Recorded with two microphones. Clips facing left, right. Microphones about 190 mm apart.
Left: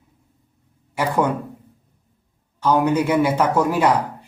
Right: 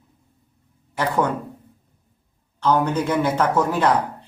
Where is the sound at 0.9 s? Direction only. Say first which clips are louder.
Left 1 dB; 10° left (ahead or behind).